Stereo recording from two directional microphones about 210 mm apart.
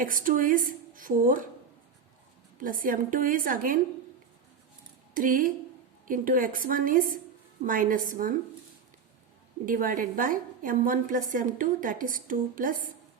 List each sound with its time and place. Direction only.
0.0 s a woman's voice: 40° right (ahead or behind)
2.6 s a woman's voice: 40° right (ahead or behind)
5.1 s a woman's voice: 40° right (ahead or behind)
9.6 s a woman's voice: 40° right (ahead or behind)